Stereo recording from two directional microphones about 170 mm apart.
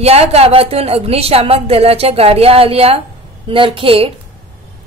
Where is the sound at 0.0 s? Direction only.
35° right (ahead or behind).